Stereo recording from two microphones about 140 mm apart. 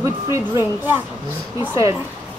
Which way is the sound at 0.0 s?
20° right (ahead or behind).